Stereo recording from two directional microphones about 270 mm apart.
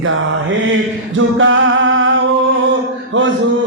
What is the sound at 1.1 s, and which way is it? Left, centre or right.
Singing, right.